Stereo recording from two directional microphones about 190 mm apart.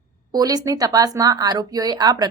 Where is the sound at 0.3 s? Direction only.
20° right (ahead or behind).